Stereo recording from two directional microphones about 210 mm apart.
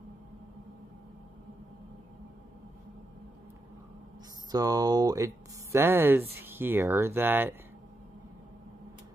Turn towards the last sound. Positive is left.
turn(degrees=-10)  # may be behind; listen again after turning